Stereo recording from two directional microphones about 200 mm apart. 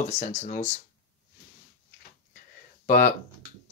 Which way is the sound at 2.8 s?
40° left (ahead or behind).